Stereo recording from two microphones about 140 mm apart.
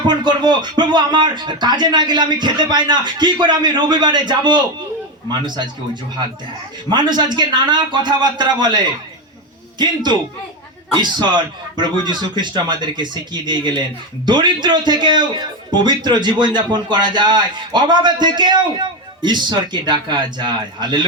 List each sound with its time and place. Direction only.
0.1 s speech: 30° right (ahead or behind)